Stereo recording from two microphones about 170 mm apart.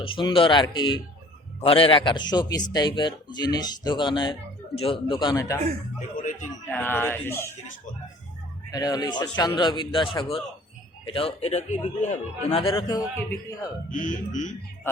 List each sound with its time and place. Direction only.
0.0 s speech: 30° left (ahead or behind)
6.7 s speech: 10° left (ahead or behind)
8.7 s speech: 25° left (ahead or behind); by 12.5 s 45° left (ahead or behind)
12.5 s speech: 30° left (ahead or behind)
13.9 s speech: 50° left (ahead or behind)